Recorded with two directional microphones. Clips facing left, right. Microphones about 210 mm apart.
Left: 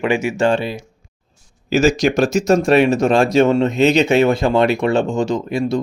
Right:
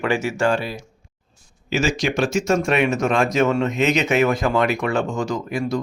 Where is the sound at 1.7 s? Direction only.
40° left (ahead or behind).